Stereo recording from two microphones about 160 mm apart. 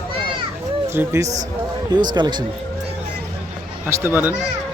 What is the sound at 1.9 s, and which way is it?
Speech, 25° right (ahead or behind).